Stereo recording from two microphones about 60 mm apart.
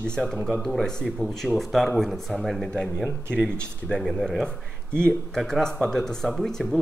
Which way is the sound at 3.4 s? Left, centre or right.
Centre.